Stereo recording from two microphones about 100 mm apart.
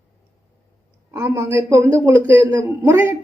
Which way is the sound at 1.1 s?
25° right (ahead or behind).